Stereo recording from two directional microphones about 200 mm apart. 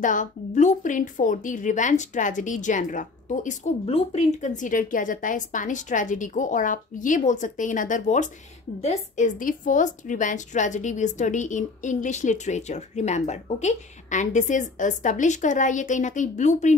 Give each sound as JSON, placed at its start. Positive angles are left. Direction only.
{"t": 0.0, "sound": "a woman's voice", "side_deg": 40}